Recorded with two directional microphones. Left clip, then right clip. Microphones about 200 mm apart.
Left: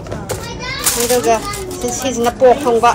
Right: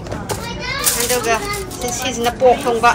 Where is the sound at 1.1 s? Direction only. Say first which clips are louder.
Left 5 dB; 15° left (ahead or behind).